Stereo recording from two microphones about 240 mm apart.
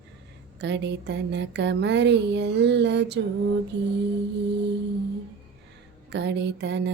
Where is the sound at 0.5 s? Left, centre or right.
Right.